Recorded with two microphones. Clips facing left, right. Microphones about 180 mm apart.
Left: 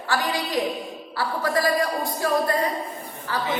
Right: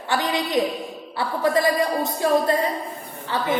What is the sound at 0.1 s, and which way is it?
Speech, 20° right (ahead or behind).